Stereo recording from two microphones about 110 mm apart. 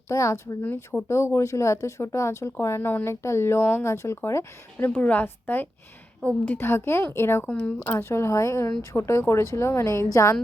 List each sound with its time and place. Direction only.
0.1 s speech: 25° left (ahead or behind)